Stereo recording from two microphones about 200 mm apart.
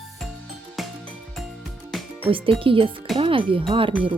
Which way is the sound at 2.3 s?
25° right (ahead or behind).